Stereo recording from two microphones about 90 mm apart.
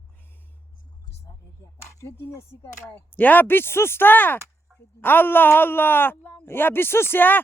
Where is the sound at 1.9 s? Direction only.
35° left (ahead or behind).